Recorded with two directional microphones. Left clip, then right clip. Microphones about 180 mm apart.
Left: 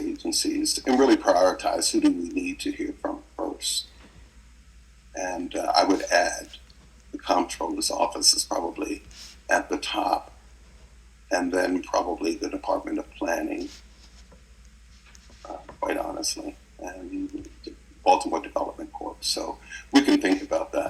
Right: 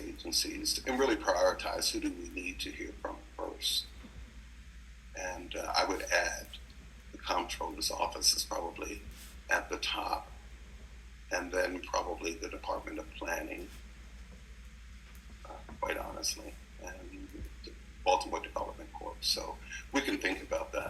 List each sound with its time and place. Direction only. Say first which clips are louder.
0.3 s speech: left 6 dB; 35° left (ahead or behind)
5.1 s speech: left 10 dB; 35° left (ahead or behind)
11.3 s speech: left 9 dB; 35° left (ahead or behind)
15.8 s speech: left 8 dB; 35° left (ahead or behind)
18.1 s speech: left 9 dB; 35° left (ahead or behind)